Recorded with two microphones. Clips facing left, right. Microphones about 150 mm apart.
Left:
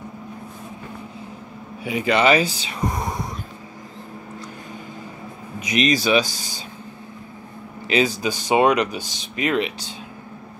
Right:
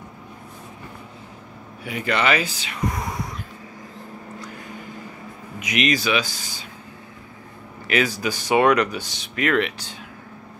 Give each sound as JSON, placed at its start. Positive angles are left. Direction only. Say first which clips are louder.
{"t": 1.9, "sound": "speech", "louder": "left 4 dB", "side_deg": 20}
{"t": 2.2, "sound": "speech", "louder": "left 5 dB", "side_deg": 35}
{"t": 5.7, "sound": "speech", "louder": "left 3 dB", "side_deg": 35}
{"t": 7.9, "sound": "speech", "louder": "left 2 dB", "side_deg": 20}